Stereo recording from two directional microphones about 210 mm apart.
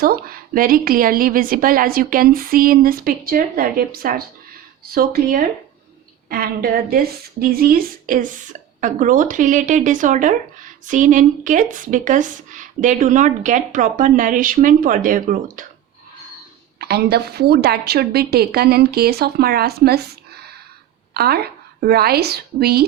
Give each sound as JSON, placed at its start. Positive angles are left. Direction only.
{"t": 0.0, "sound": "a woman's voice", "side_deg": -45}
{"t": 16.7, "sound": "a woman's voice", "side_deg": -50}